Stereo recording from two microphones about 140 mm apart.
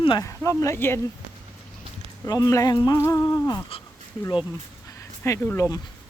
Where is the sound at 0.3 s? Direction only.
20° left (ahead or behind).